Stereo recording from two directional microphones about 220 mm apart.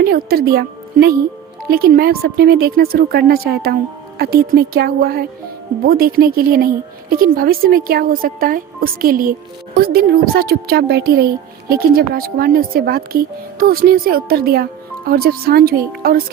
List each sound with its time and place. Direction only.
0.0 s a woman's voice: 45° right (ahead or behind)